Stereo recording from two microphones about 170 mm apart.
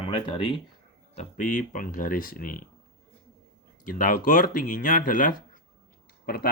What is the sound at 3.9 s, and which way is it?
Speech, 55° left (ahead or behind).